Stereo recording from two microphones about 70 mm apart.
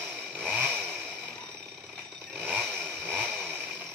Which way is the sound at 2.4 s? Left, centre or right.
Centre.